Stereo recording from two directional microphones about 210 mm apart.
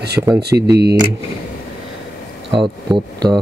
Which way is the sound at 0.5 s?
10° right (ahead or behind).